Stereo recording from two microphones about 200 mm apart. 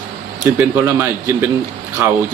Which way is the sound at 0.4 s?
10° right (ahead or behind).